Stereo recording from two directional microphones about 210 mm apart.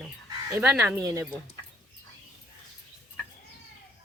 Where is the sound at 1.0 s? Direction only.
15° right (ahead or behind).